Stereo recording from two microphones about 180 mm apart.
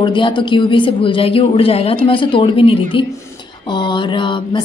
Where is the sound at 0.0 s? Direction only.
25° left (ahead or behind).